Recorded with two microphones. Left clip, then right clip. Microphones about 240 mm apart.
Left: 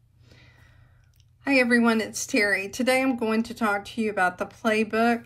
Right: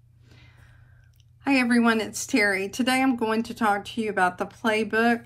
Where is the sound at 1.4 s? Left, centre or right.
Left.